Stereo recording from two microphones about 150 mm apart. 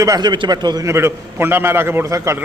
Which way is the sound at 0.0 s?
25° right (ahead or behind).